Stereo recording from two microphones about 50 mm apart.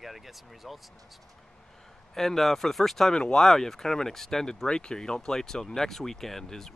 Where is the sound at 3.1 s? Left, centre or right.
Centre.